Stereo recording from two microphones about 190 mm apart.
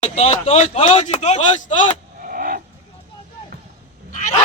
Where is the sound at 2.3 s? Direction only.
50° right (ahead or behind).